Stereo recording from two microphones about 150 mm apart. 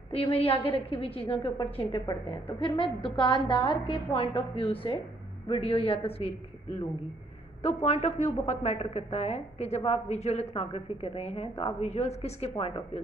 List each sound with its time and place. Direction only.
0.1 s a woman's voice: 40° left (ahead or behind)
7.6 s a woman's voice: 50° left (ahead or behind)